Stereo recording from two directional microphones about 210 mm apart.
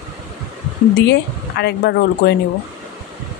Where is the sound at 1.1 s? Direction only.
55° left (ahead or behind).